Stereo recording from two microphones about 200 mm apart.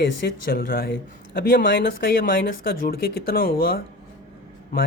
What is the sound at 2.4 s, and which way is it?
Speech, 45° left (ahead or behind).